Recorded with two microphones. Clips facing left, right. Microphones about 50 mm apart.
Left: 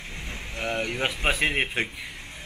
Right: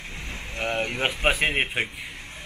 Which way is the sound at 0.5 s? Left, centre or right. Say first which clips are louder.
Right 2 dB; centre.